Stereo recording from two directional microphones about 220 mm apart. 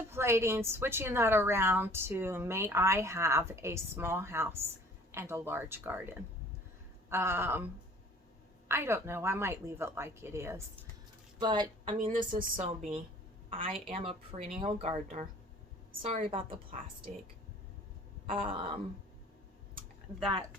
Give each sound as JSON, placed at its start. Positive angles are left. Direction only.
{"t": 0.1, "sound": "a woman's voice", "side_deg": -10}
{"t": 8.6, "sound": "a woman's voice", "side_deg": -10}
{"t": 12.4, "sound": "a woman's voice", "side_deg": -35}
{"t": 13.5, "sound": "a woman's voice", "side_deg": -25}
{"t": 18.3, "sound": "speech", "side_deg": -25}